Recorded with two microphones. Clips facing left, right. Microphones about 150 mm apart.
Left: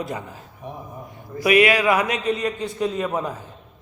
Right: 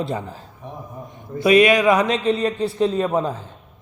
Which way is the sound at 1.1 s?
25° right (ahead or behind).